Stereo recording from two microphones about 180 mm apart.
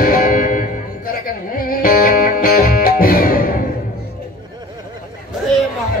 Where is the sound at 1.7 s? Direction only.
50° left (ahead or behind).